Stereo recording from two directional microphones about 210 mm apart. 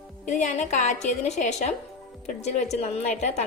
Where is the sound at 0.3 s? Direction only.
35° left (ahead or behind).